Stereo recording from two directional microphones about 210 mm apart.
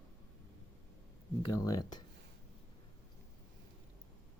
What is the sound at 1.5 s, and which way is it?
Speech, 20° left (ahead or behind).